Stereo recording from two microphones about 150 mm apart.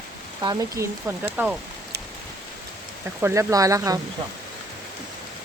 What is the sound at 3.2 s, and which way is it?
Speech, 20° right (ahead or behind).